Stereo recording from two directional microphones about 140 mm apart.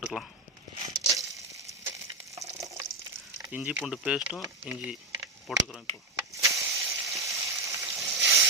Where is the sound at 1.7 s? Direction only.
20° right (ahead or behind).